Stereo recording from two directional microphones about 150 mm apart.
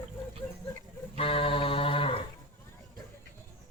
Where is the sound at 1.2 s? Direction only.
35° left (ahead or behind).